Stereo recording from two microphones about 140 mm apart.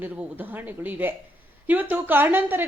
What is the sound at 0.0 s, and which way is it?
A woman's voice, 15° right (ahead or behind).